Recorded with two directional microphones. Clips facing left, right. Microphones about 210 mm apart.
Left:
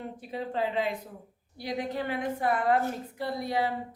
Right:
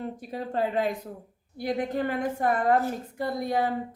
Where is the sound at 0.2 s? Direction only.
45° right (ahead or behind).